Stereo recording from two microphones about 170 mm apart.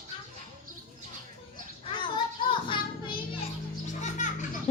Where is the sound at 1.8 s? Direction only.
30° left (ahead or behind).